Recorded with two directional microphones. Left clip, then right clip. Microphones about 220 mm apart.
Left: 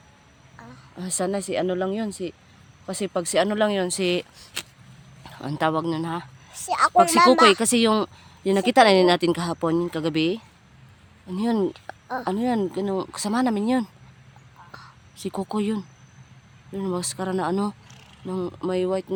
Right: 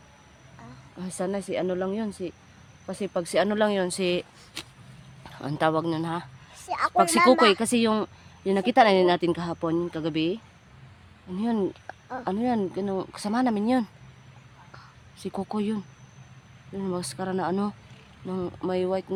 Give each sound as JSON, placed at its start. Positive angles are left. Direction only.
{"t": 0.9, "sound": "speech", "side_deg": 20}
{"t": 6.5, "sound": "a sound", "side_deg": 35}
{"t": 6.9, "sound": "speech", "side_deg": 15}
{"t": 7.2, "sound": "speech", "side_deg": 40}
{"t": 7.4, "sound": "speech", "side_deg": 20}
{"t": 15.2, "sound": "speech", "side_deg": 20}